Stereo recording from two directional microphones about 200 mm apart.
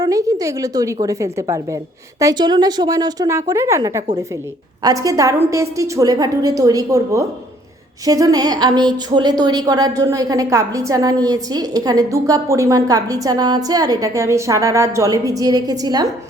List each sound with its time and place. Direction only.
0.0 s a woman's voice: 15° right (ahead or behind)